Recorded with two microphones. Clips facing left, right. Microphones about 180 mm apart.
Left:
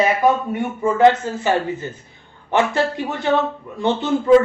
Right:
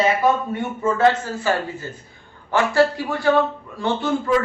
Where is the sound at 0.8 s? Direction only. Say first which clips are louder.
Left 4 dB; 20° left (ahead or behind).